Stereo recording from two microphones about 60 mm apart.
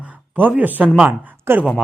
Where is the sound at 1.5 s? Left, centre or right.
Right.